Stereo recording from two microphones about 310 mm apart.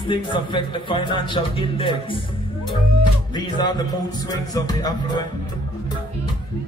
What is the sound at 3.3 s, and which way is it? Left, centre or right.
A man's voice, centre.